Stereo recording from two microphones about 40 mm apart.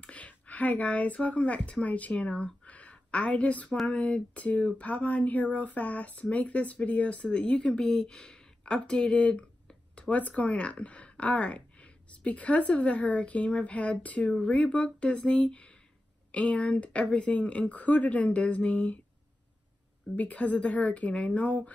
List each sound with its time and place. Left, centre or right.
0.0 s speech: left
7.8 s speech: centre
8.2 s speech: left
9.9 s speech: left
20.2 s speech: left